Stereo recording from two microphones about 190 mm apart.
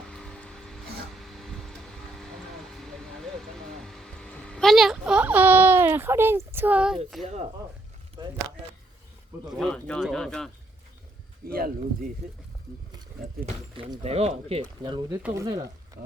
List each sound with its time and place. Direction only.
0.1 s music: 5° left (ahead or behind)
1.1 s a sound: centre (ahead or behind)
2.7 s music: centre (ahead or behind)
9.5 s speech: centre (ahead or behind)
11.4 s speech: 50° right (ahead or behind)
13.4 s speech: 30° right (ahead or behind)